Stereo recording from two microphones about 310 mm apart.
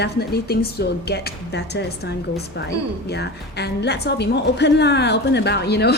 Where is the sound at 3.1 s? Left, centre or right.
Left.